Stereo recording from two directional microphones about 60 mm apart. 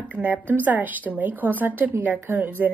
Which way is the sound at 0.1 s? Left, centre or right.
Right.